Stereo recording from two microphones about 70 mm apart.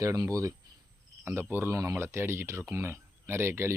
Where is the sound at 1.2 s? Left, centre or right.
Right.